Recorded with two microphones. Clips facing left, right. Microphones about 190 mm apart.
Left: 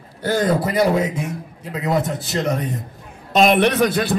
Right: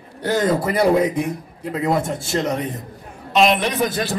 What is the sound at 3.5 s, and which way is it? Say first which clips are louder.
Speech: left 5 dB; 70° left (ahead or behind).